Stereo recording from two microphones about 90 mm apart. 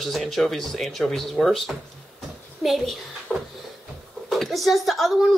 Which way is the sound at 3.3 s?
15° left (ahead or behind).